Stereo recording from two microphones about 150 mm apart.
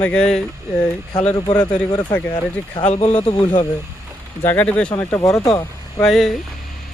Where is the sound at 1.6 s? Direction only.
30° left (ahead or behind).